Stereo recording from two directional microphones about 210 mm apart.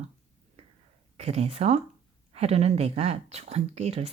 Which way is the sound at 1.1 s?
30° right (ahead or behind).